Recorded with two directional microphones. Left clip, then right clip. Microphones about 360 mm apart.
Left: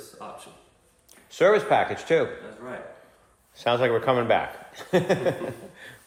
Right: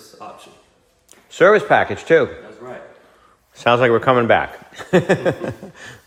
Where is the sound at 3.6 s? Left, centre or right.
Right.